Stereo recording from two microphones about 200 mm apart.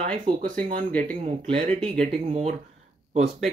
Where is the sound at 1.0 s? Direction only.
40° right (ahead or behind).